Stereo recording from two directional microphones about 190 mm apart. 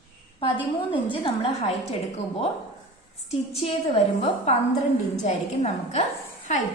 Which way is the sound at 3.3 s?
30° left (ahead or behind).